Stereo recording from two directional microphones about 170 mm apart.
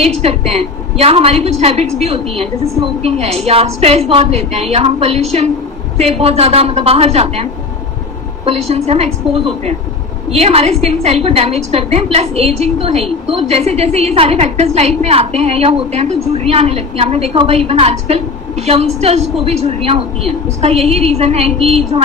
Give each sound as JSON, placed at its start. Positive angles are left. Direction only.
{"t": 0.2, "sound": "a woman's voice", "side_deg": -40}
{"t": 8.4, "sound": "a woman's voice", "side_deg": -35}